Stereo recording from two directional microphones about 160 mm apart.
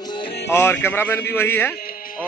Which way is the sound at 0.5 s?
15° left (ahead or behind).